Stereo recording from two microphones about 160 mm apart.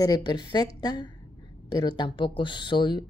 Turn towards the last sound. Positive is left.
turn(degrees=30)  # may be behind; listen again after turning